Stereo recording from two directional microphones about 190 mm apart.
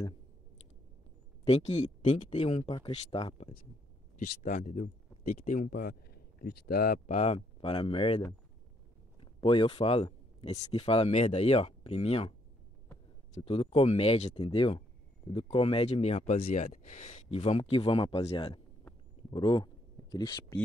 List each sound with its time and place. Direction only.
1.4 s speech: 35° left (ahead or behind)
4.4 s speech: 40° left (ahead or behind)
9.2 s speech: 30° left (ahead or behind)
13.4 s speech: 30° left (ahead or behind)
16.3 s speech: 50° left (ahead or behind)
16.6 s speech: 40° left (ahead or behind)
17.4 s speech: 30° left (ahead or behind)